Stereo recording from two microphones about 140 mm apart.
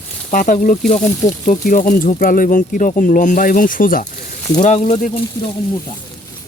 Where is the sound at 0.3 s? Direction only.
65° left (ahead or behind); by 4.0 s 80° left.